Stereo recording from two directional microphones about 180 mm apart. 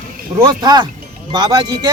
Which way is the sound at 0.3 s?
20° right (ahead or behind).